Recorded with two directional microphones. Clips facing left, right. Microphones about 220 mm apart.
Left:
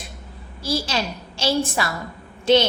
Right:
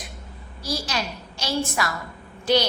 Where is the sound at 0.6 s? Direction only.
30° left (ahead or behind).